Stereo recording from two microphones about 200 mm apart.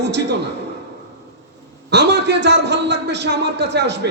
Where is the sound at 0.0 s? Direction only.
60° right (ahead or behind).